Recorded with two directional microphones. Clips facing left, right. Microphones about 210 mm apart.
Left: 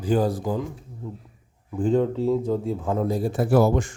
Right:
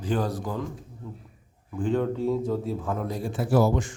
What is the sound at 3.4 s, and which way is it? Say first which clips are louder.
Speech: left 3 dB; 55° left (ahead or behind).